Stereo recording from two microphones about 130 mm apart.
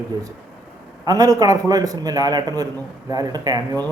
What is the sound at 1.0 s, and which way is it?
A man's voice, 30° right (ahead or behind).